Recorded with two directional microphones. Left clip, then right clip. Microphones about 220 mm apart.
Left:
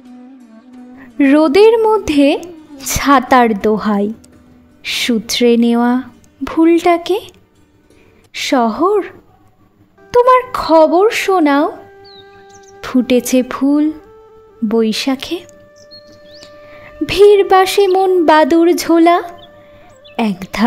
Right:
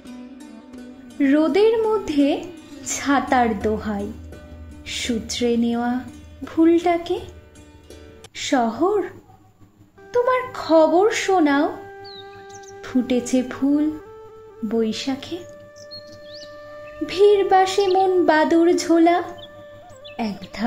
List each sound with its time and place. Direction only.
1.1 s a woman's voice: 45° left (ahead or behind)
10.1 s speech: 45° left (ahead or behind)
11.9 s music: centre (ahead or behind)
12.8 s speech: 50° left (ahead or behind)
15.4 s music: centre (ahead or behind)
17.0 s speech: 50° left (ahead or behind)